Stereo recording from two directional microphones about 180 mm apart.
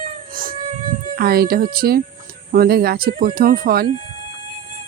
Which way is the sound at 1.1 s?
55° right (ahead or behind).